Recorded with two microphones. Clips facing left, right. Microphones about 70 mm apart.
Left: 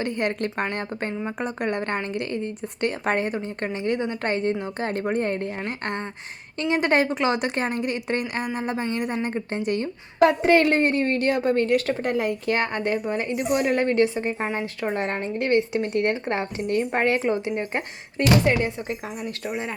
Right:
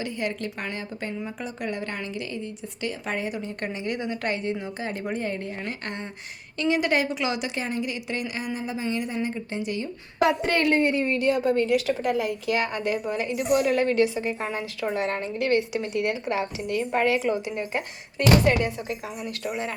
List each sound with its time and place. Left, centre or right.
0.0 s speech: left
3.3 s a woman's voice: left
10.4 s a woman's voice: left